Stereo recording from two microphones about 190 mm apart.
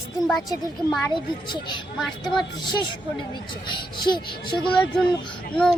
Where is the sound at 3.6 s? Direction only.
25° left (ahead or behind).